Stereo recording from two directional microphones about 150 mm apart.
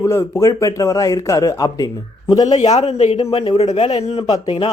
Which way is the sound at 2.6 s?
45° left (ahead or behind).